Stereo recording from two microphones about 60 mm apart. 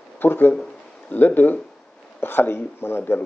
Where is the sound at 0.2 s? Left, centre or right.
Left.